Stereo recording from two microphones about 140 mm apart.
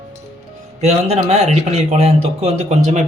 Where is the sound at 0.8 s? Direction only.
50° right (ahead or behind).